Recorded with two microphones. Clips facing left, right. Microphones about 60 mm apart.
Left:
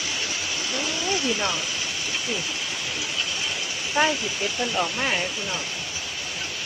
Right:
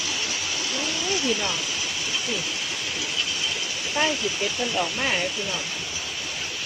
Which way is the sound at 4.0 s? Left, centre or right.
Centre.